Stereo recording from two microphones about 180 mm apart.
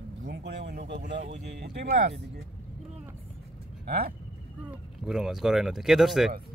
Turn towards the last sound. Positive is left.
turn(degrees=0)  # may be behind; listen again after turning